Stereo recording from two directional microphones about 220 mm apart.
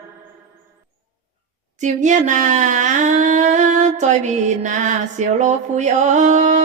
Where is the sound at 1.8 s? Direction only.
35° right (ahead or behind).